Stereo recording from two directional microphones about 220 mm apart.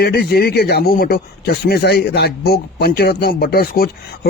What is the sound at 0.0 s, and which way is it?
Speech, 45° left (ahead or behind).